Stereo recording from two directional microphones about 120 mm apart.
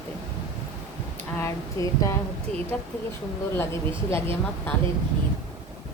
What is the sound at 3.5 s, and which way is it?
Speech, 20° left (ahead or behind).